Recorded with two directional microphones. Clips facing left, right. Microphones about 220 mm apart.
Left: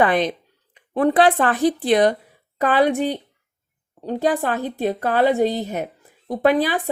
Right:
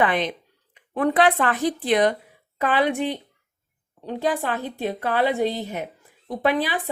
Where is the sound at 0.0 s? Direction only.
40° left (ahead or behind).